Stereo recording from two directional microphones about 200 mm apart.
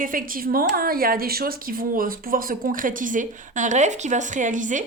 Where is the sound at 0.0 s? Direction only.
45° right (ahead or behind).